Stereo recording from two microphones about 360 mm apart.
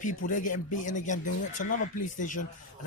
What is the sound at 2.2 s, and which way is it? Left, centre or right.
Speech, left.